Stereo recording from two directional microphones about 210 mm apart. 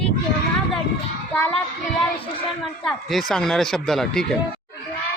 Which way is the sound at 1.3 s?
5° left (ahead or behind).